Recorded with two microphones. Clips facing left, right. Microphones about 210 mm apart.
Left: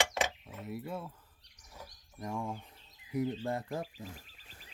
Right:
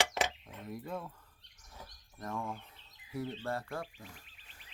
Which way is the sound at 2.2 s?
15° left (ahead or behind).